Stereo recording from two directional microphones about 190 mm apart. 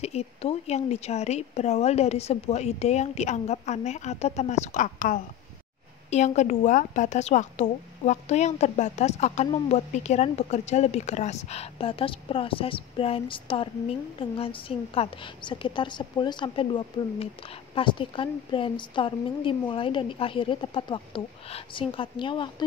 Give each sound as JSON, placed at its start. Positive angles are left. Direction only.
{"t": 0.0, "sound": "a woman's voice", "side_deg": 30}